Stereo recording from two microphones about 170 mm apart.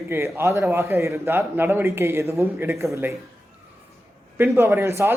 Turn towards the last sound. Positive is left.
turn(degrees=-15)  # may be behind; listen again after turning